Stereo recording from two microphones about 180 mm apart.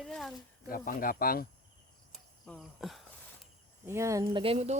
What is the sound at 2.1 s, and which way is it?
Speech, centre (ahead or behind).